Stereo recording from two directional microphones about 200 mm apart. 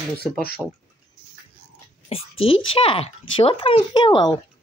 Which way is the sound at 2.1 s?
30° left (ahead or behind).